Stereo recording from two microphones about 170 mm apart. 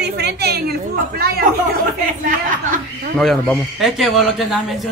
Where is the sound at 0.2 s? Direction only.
70° right (ahead or behind).